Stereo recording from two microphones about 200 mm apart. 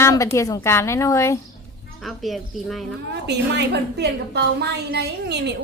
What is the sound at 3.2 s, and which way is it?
A woman's voice, 55° right (ahead or behind).